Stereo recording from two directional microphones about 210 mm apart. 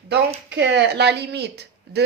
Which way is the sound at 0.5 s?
55° right (ahead or behind).